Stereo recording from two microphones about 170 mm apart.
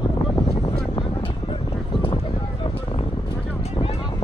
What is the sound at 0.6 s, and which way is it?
Vehicle, 30° left (ahead or behind).